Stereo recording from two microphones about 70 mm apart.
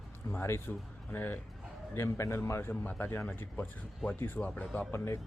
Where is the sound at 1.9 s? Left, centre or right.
Left.